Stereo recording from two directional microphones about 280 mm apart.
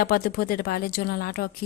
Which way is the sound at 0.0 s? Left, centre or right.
Left.